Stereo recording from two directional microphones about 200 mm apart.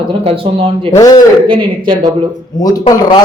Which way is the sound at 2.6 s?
20° left (ahead or behind).